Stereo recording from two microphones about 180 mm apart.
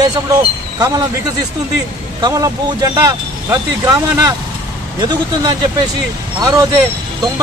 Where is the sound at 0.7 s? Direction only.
20° right (ahead or behind).